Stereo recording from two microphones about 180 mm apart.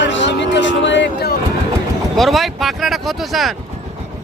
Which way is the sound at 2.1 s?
Centre (ahead or behind).